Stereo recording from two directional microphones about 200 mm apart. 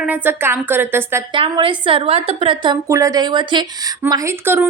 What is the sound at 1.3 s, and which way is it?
A woman's voice, 25° right (ahead or behind).